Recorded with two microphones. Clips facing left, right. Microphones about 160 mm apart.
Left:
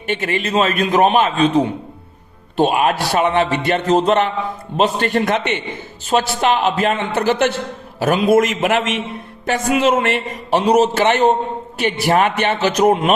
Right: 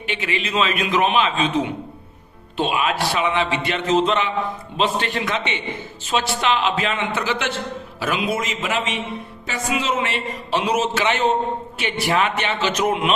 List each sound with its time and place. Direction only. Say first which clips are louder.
0.1 s a man's voice: left 6 dB; 50° left (ahead or behind)
10.6 s a man's voice: left 7 dB; 40° left (ahead or behind)